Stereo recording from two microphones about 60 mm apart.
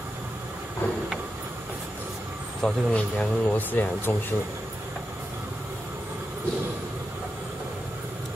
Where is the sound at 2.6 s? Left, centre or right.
Left.